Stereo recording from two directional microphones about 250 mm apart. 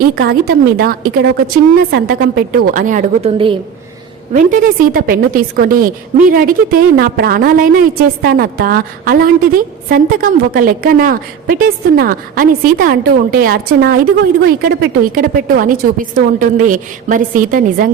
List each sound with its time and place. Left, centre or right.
0.0 s a woman's voice: right
4.3 s a woman's voice: right